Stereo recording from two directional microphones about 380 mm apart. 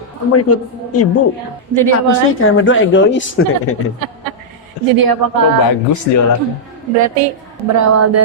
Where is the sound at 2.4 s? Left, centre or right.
Left.